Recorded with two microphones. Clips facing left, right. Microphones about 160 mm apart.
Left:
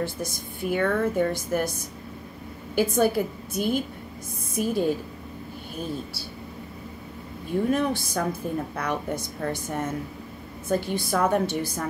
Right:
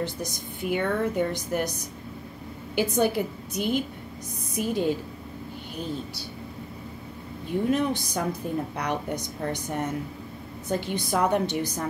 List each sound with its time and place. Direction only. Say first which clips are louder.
0.0 s a woman's voice: left 1 dB; 20° right (ahead or behind)
7.7 s a woman's voice: left 1 dB; 20° right (ahead or behind)